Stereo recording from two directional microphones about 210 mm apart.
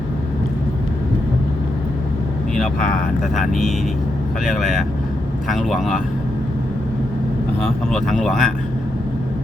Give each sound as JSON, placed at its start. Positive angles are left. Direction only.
{"t": 3.3, "sound": "speech", "side_deg": 0}
{"t": 7.6, "sound": "speech", "side_deg": 0}